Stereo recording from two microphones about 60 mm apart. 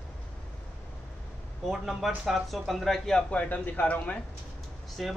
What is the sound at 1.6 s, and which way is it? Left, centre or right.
Speech, centre.